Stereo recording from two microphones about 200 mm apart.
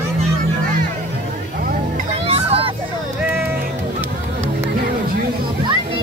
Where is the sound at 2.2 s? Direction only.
30° right (ahead or behind).